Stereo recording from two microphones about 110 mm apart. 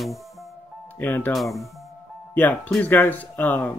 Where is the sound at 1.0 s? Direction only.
15° left (ahead or behind).